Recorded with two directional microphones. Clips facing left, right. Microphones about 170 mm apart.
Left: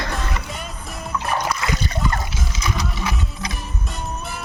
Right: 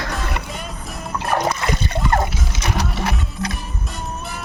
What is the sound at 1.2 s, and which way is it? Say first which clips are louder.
Splash: right 4 dB; 55° right (ahead or behind).